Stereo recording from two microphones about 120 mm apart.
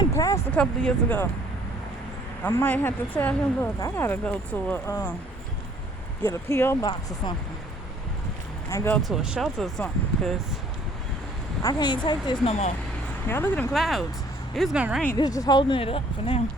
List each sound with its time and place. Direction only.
0.0 s vehicle: 30° left (ahead or behind)
0.5 s speech: 5° left (ahead or behind)
2.4 s speech: 20° left (ahead or behind)
6.2 s speech: 20° left (ahead or behind)
8.7 s speech: 20° left (ahead or behind)
9.0 s speech: centre (ahead or behind)
11.6 s speech: 35° left (ahead or behind)
12.5 s speech: 65° left (ahead or behind)
13.2 s speech: 20° left (ahead or behind)
13.7 s speech: centre (ahead or behind)
14.8 s speech: 10° right (ahead or behind)
15.2 s speech: 35° left (ahead or behind); by 16.4 s 50° left (ahead or behind)